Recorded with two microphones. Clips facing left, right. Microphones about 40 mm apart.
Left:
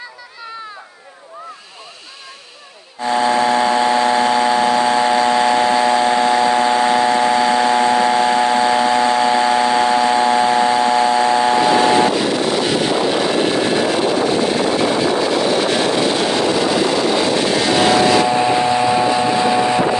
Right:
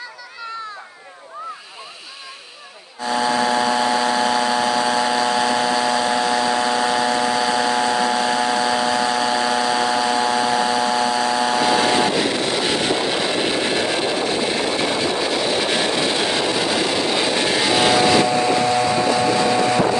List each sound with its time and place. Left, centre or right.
3.1 s a sound: left
12.2 s vehicle: centre
18.3 s vehicle: left